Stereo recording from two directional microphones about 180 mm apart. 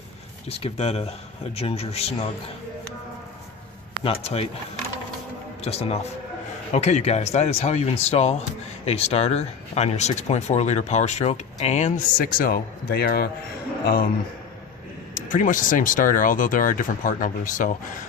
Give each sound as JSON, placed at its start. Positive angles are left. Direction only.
{"t": 0.4, "sound": "speech", "side_deg": 35}
{"t": 4.0, "sound": "speech", "side_deg": 35}
{"t": 5.6, "sound": "speech", "side_deg": 35}
{"t": 15.1, "sound": "speech", "side_deg": 45}